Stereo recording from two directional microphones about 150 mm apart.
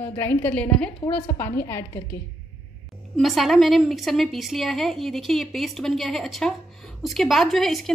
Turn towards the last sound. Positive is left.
turn(degrees=0)  # may be behind; listen again after turning